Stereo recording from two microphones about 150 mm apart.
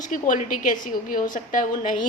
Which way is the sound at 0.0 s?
60° left (ahead or behind).